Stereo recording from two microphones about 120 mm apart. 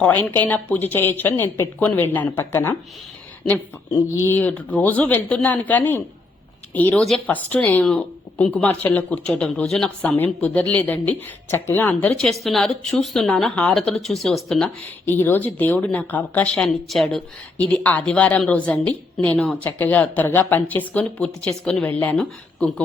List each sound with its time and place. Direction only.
0.0 s speech: 15° left (ahead or behind)
4.1 s speech: 15° left (ahead or behind)
12.2 s a woman's voice: centre (ahead or behind)
15.0 s speech: 15° left (ahead or behind)
17.6 s speech: 10° left (ahead or behind)